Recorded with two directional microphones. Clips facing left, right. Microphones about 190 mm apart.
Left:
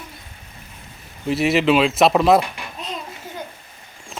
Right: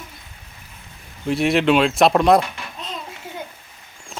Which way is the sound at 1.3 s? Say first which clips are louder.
Even; centre (ahead or behind).